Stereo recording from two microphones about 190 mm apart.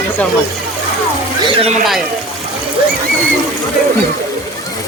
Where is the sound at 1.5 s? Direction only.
30° right (ahead or behind).